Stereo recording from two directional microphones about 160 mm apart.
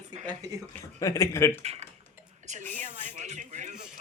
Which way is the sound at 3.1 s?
45° right (ahead or behind).